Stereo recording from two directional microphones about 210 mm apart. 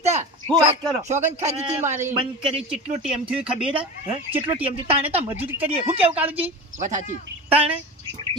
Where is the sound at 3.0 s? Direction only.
5° right (ahead or behind).